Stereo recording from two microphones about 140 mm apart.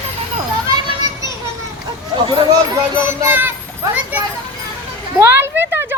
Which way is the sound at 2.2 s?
35° right (ahead or behind).